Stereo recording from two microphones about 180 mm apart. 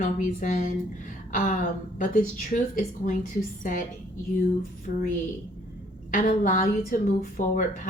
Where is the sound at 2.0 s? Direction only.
50° left (ahead or behind).